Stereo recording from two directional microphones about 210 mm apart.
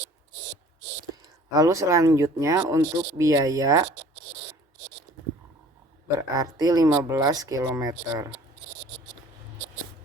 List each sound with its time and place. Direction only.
1.5 s speech: 15° right (ahead or behind)
6.1 s speech: 15° right (ahead or behind)